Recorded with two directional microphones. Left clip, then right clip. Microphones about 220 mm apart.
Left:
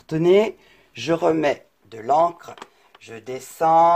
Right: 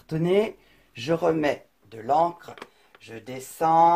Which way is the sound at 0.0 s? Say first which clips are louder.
Left 6 dB; 35° left (ahead or behind).